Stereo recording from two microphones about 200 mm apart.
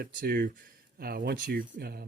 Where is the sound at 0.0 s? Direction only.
50° right (ahead or behind).